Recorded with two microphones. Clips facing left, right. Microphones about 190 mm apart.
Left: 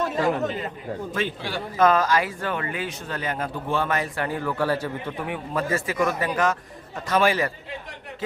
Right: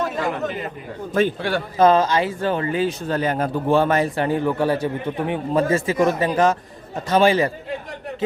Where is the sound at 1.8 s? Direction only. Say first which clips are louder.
Right 4 dB; 25° right (ahead or behind).